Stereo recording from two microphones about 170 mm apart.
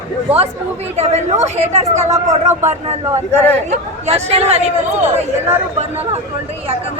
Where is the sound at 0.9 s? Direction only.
40° right (ahead or behind).